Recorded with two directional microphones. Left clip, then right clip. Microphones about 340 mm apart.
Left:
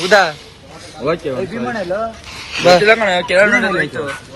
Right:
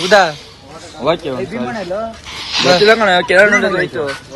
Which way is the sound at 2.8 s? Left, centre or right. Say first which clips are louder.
Right 2 dB; right.